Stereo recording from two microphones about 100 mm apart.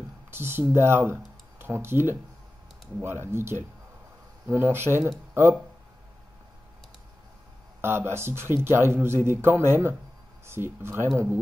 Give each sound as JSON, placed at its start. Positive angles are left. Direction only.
{"t": 0.3, "sound": "speech", "side_deg": -25}
{"t": 7.8, "sound": "speech", "side_deg": -25}